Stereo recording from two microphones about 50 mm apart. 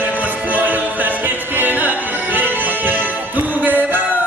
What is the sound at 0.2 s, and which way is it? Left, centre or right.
Music, right.